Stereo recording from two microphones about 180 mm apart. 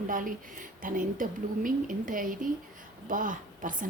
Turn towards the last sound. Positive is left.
turn(degrees=-45)  # may be behind; listen again after turning